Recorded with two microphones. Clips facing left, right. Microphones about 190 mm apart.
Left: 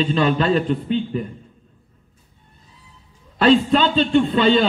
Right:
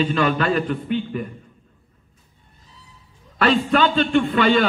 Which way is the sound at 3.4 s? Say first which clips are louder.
Left 3 dB; 25° left (ahead or behind).